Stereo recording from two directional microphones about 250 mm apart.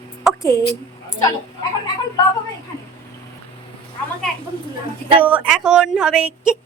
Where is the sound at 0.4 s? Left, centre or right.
Centre.